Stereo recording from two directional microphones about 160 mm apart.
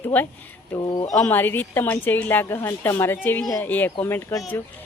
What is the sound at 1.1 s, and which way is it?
A woman's voice, 10° left (ahead or behind).